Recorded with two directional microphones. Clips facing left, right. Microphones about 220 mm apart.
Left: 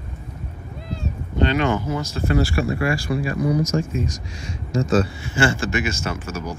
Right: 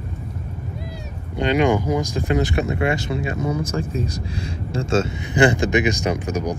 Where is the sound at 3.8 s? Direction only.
35° right (ahead or behind).